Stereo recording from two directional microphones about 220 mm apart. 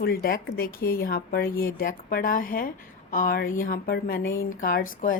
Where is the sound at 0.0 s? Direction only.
45° left (ahead or behind).